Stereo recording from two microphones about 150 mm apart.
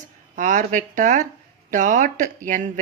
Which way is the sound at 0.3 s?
55° right (ahead or behind).